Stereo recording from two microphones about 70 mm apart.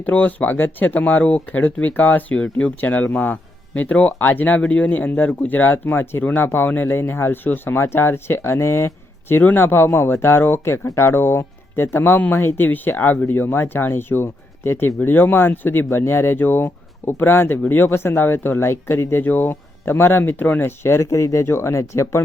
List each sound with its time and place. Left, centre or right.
0.0 s speech: left
9.3 s speech: left